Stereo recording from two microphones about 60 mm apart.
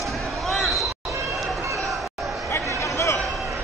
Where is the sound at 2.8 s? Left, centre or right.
Left.